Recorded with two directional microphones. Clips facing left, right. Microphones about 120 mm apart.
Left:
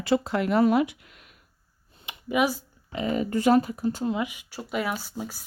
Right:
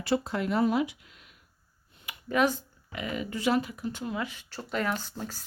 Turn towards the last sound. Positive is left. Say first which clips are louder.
# left 1 dB
turn(degrees=10)  # may be behind; listen again after turning